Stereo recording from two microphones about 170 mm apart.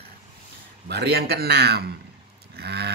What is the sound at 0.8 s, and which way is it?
Speech, 75° right (ahead or behind).